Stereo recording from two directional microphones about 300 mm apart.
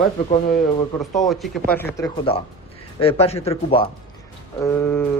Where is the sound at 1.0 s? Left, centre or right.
Centre.